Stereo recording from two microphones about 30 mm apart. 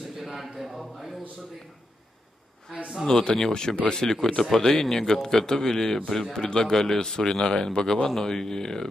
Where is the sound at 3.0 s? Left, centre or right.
Centre.